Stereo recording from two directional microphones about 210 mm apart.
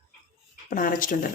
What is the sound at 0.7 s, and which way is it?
Speech, 40° left (ahead or behind).